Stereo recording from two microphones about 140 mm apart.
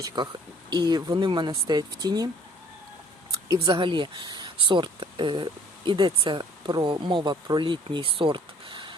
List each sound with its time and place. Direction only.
0.2 s speech: 30° right (ahead or behind)
3.5 s speech: 35° right (ahead or behind)